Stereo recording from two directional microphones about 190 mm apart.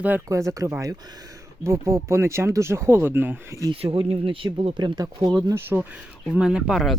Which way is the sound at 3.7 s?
30° right (ahead or behind).